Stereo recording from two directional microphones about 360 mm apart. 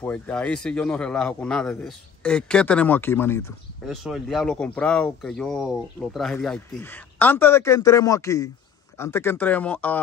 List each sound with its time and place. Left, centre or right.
0.0 s a man's voice: centre